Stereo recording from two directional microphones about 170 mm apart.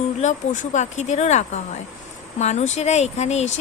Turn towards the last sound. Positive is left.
turn(degrees=40)  # may be behind; listen again after turning